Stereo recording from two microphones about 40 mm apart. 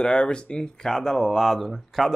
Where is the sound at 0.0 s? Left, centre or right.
Left.